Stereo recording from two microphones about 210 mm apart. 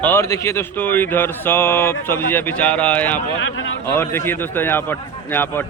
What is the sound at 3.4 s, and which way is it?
Speech, 65° left (ahead or behind).